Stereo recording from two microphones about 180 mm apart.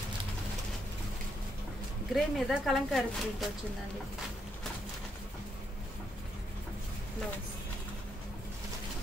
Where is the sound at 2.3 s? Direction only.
Centre (ahead or behind).